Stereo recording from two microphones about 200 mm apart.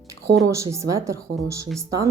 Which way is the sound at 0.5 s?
15° right (ahead or behind).